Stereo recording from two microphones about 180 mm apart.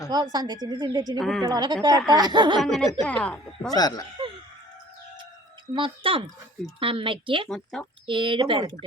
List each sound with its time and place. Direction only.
0.1 s speech: 20° right (ahead or behind)
1.2 s a woman's voice: centre (ahead or behind)
1.5 s speech: 20° right (ahead or behind)
2.6 s a woman's voice: centre (ahead or behind)
3.8 s speech: 20° left (ahead or behind)
5.7 s speech: 30° right (ahead or behind)
7.4 s a woman's voice: 5° left (ahead or behind)
8.0 s speech: 25° right (ahead or behind)